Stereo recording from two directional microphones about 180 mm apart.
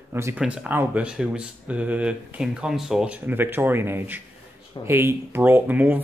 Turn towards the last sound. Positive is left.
turn(degrees=-10)  # may be behind; listen again after turning